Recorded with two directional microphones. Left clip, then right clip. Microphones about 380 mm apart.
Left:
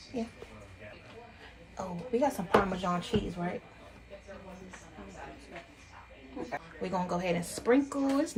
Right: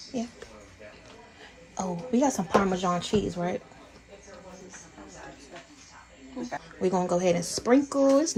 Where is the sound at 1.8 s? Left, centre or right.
Right.